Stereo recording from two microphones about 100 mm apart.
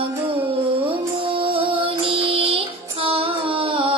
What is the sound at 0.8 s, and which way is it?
Music, 65° right (ahead or behind).